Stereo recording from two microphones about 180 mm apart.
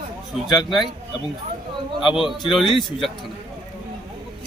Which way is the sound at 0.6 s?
25° left (ahead or behind).